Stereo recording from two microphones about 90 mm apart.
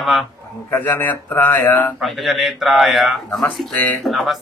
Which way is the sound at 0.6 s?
20° left (ahead or behind).